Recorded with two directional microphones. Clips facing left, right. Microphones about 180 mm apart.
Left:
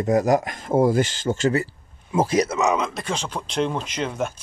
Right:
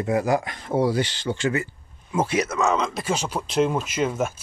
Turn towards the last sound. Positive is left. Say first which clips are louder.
# right 2 dB
turn(degrees=-5)  # may be behind; listen again after turning